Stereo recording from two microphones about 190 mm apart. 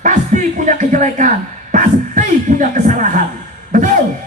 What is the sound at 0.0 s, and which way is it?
Speech, 40° right (ahead or behind).